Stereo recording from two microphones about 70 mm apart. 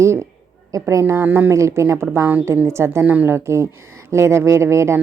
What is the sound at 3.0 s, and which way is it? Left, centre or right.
Speech, right.